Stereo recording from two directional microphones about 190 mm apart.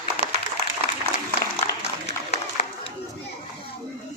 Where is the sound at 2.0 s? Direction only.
35° left (ahead or behind).